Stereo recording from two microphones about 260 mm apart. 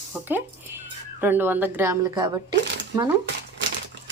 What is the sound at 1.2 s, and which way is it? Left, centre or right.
Speech, centre.